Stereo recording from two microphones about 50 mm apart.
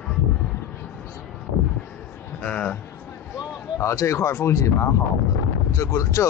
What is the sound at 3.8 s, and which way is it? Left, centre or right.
Speech, left.